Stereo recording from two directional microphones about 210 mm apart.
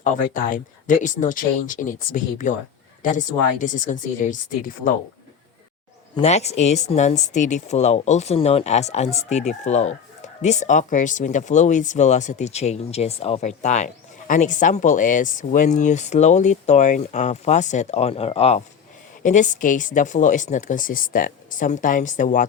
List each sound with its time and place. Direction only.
0.0 s speech: 40° left (ahead or behind)
6.1 s speech: 30° left (ahead or behind)